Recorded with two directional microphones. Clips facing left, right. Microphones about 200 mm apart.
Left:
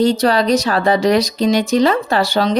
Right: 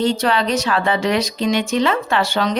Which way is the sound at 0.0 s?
40° left (ahead or behind).